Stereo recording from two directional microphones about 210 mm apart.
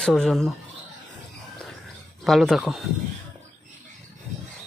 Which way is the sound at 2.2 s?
Centre (ahead or behind).